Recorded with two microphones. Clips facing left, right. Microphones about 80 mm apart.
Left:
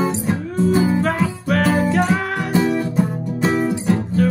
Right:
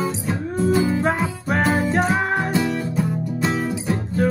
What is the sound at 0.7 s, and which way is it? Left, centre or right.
Music, left.